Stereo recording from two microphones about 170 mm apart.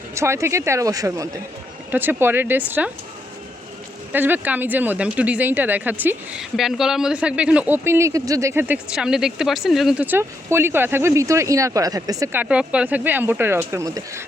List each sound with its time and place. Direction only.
0.1 s speech: 15° right (ahead or behind)
4.1 s speech: 10° right (ahead or behind)